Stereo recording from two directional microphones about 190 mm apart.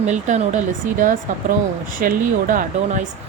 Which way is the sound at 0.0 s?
35° right (ahead or behind).